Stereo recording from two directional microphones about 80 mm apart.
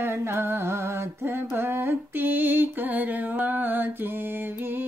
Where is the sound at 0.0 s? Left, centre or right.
Right.